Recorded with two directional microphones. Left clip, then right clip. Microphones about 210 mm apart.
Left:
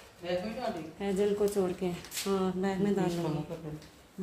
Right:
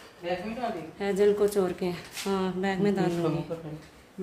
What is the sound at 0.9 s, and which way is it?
A woman's voice, 15° right (ahead or behind).